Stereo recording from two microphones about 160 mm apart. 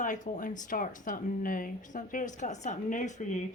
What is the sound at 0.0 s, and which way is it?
Speech, 55° left (ahead or behind).